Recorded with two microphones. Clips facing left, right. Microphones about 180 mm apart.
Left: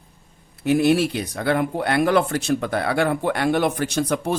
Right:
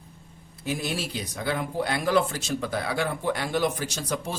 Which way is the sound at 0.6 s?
65° left (ahead or behind).